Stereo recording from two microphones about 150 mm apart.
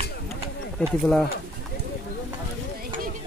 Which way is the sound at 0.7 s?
5° left (ahead or behind).